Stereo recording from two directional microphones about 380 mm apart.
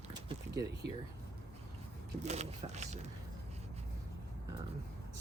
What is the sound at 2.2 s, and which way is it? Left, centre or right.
Speech, centre.